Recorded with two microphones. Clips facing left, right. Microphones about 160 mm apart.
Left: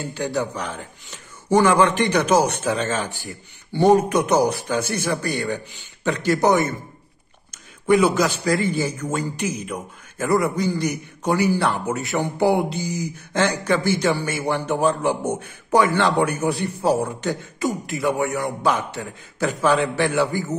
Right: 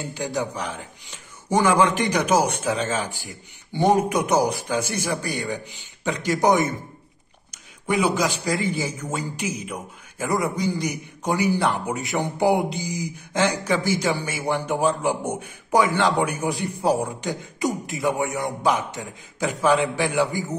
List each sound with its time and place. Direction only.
0.1 s speech: 15° right (ahead or behind)
7.5 s speech: 10° right (ahead or behind)
17.0 s beatboxing: 15° right (ahead or behind)
19.4 s speech: 15° right (ahead or behind)